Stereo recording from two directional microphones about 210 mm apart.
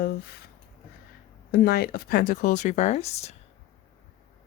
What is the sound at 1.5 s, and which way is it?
A woman's voice, 45° left (ahead or behind).